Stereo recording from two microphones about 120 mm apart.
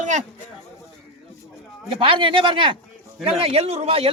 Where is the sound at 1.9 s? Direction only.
45° right (ahead or behind).